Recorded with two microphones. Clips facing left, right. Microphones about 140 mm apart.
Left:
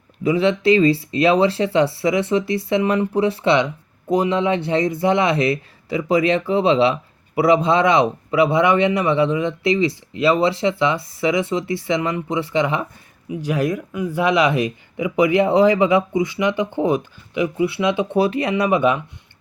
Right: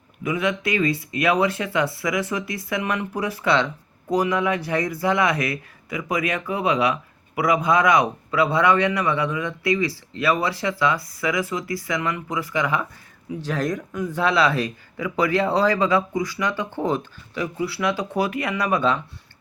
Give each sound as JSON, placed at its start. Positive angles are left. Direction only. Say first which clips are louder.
{"t": 0.2, "sound": "speech", "louder": "left 6 dB", "side_deg": 30}
{"t": 13.3, "sound": "speech", "louder": "left 4 dB", "side_deg": 15}